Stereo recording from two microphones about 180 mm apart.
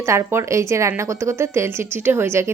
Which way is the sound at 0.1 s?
15° right (ahead or behind).